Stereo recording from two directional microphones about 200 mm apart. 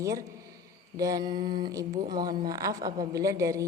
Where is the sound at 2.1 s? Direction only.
20° right (ahead or behind).